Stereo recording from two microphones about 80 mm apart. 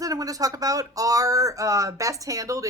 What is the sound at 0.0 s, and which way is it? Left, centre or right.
Speech, right.